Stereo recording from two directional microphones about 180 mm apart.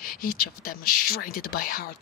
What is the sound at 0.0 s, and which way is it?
Speech, 50° left (ahead or behind).